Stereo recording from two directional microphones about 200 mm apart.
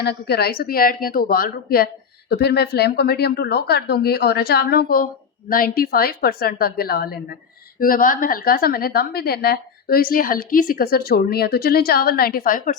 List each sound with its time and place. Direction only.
0.0 s a woman's voice: 55° left (ahead or behind)